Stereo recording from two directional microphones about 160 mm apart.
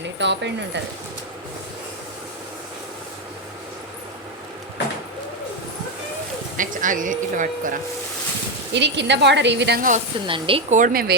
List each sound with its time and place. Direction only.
0.2 s speech: 90° right
6.6 s speech: 55° right (ahead or behind)
8.7 s speech: 90° right
10.2 s speech: 35° right (ahead or behind)
10.7 s speech: 55° right (ahead or behind)